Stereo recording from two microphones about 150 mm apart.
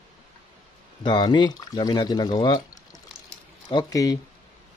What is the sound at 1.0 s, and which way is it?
Speech, 30° left (ahead or behind).